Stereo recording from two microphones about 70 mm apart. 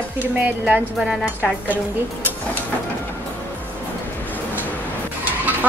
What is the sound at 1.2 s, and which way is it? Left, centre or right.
Speech, right.